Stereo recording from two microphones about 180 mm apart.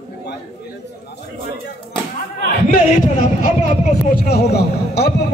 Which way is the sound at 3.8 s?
55° left (ahead or behind).